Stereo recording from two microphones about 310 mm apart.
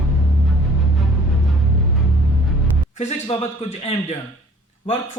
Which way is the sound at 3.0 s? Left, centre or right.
Left.